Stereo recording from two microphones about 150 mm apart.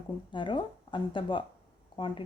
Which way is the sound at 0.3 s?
30° left (ahead or behind).